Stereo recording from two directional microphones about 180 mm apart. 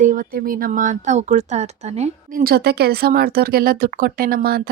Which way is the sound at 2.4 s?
60° right (ahead or behind).